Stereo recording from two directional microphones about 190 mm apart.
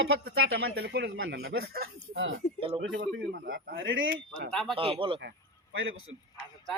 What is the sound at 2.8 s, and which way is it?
Speech, 65° right (ahead or behind).